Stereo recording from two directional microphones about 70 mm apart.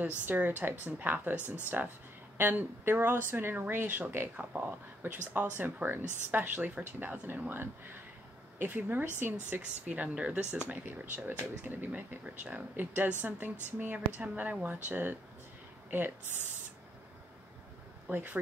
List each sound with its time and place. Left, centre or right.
0.0 s speech: right
18.1 s speech: right